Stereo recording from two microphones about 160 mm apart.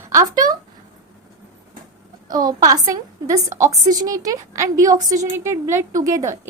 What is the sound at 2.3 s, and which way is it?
A woman's voice, 25° right (ahead or behind).